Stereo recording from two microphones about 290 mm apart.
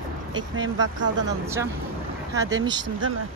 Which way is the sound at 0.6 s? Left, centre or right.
Right.